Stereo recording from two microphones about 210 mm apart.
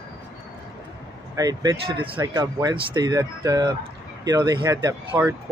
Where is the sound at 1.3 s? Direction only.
15° right (ahead or behind).